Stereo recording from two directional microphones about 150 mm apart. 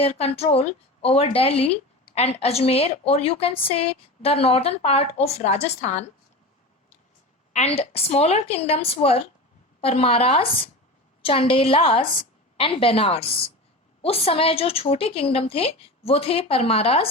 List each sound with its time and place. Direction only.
0.0 s a woman's voice: 40° left (ahead or behind)
7.5 s a woman's voice: 45° left (ahead or behind)